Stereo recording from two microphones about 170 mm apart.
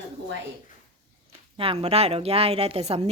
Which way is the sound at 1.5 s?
35° right (ahead or behind).